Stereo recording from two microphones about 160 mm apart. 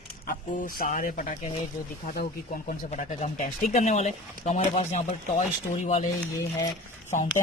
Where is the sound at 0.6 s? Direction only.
60° left (ahead or behind).